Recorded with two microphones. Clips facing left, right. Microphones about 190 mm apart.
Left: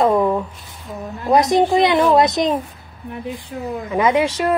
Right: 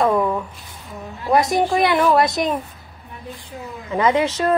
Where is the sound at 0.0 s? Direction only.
20° left (ahead or behind).